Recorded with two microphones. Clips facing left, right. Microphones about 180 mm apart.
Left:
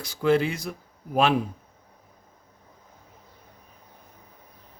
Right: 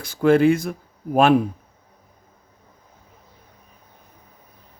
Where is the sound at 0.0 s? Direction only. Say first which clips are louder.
Right 7 dB; 50° right (ahead or behind).